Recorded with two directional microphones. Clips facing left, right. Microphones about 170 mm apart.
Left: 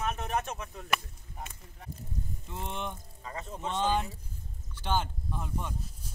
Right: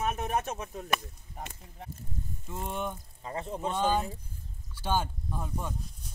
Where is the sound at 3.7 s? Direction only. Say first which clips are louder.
Even; 10° right (ahead or behind).